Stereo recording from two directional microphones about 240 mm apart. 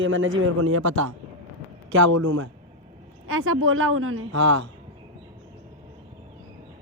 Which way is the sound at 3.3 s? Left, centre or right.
Right.